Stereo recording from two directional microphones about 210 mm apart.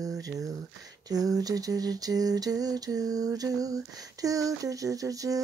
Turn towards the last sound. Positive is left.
turn(degrees=-15)  # may be behind; listen again after turning